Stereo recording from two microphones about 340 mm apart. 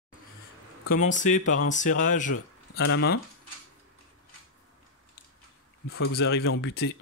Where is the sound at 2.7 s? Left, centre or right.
Left.